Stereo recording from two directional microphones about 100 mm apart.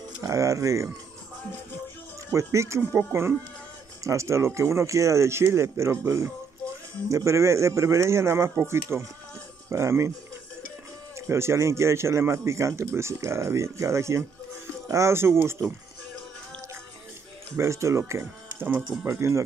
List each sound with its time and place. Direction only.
0.2 s speech: 30° right (ahead or behind)
2.3 s a man's voice: 30° right (ahead or behind)
11.1 s a man's voice: 25° right (ahead or behind)
17.6 s a man's voice: 30° right (ahead or behind)